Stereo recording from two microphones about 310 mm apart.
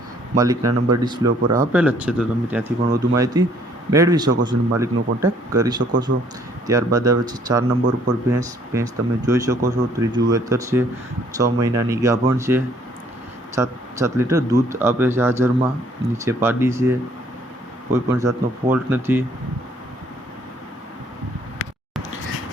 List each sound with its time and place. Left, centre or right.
0.3 s speech: centre
6.1 s a man's voice: right
6.7 s speech: centre
17.9 s speech: centre